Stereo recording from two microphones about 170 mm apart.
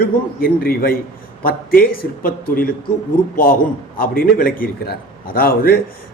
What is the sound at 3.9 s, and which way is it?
A man's voice, 60° left (ahead or behind).